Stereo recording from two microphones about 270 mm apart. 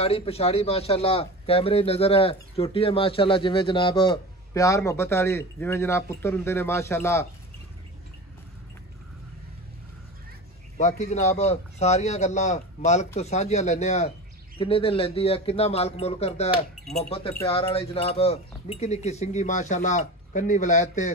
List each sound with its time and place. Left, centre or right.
0.0 s speech: left
10.8 s speech: left
17.5 s speech: left